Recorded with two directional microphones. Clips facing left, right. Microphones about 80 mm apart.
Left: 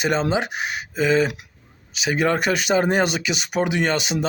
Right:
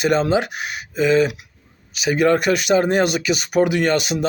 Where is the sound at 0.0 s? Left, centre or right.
Left.